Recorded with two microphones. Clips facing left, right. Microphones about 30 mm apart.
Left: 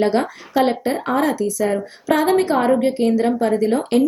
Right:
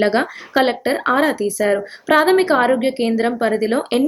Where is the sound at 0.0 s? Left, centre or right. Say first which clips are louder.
Right 1 dB; right.